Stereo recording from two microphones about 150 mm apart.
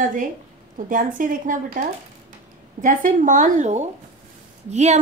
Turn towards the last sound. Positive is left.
turn(degrees=-50)  # may be behind; listen again after turning